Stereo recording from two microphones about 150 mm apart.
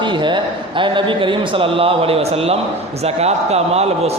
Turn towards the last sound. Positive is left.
turn(degrees=-45)  # may be behind; listen again after turning